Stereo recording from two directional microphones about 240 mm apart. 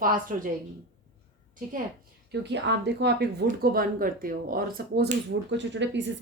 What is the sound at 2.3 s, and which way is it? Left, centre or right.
A woman's voice, right.